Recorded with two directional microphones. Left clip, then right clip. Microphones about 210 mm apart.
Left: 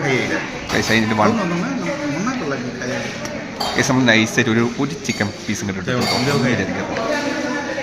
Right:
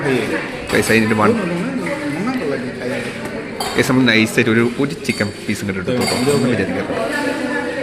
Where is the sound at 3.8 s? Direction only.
Centre (ahead or behind).